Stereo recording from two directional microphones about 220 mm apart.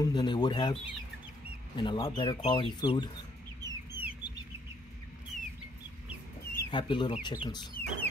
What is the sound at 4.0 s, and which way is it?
Bird, 10° right (ahead or behind).